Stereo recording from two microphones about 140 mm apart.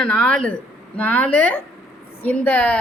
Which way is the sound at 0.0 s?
5° left (ahead or behind).